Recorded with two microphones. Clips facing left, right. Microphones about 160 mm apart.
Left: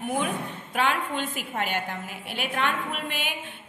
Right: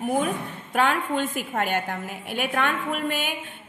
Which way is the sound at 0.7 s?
45° right (ahead or behind).